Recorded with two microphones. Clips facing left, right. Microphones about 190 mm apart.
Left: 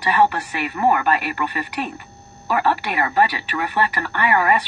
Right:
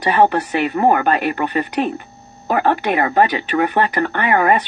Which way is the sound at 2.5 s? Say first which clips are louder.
Right 4 dB; 50° right (ahead or behind).